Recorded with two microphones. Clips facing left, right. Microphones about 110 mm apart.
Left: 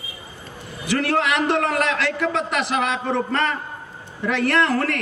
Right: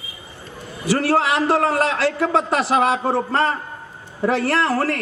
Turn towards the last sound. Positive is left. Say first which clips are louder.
# even
turn(degrees=-35)  # may be behind; listen again after turning